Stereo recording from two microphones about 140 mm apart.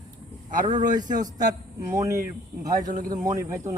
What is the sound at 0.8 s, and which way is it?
Speech, 65° right (ahead or behind).